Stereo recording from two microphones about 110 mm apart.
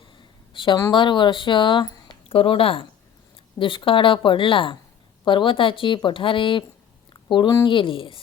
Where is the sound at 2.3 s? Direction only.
55° left (ahead or behind).